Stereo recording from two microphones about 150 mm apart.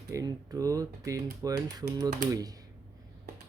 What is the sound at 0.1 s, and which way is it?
Speech, 20° right (ahead or behind).